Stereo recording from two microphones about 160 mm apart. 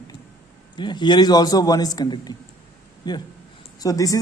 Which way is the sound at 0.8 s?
30° left (ahead or behind).